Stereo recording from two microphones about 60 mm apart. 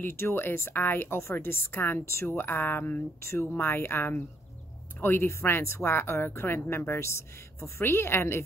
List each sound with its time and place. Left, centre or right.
0.0 s speech: left